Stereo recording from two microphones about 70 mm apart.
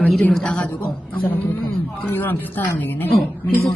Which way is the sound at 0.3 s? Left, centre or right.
Centre.